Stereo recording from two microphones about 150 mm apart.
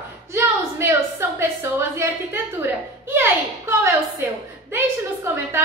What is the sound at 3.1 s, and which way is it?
Speech, 15° right (ahead or behind).